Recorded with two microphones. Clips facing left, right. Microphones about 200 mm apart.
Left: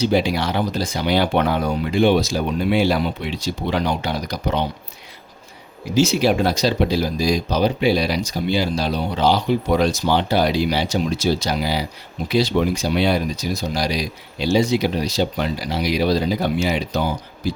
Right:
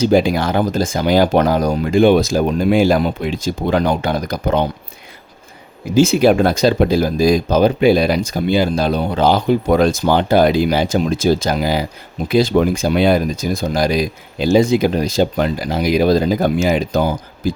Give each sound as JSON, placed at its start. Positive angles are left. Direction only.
{"t": 0.0, "sound": "speech", "side_deg": -50}
{"t": 5.9, "sound": "speech", "side_deg": -50}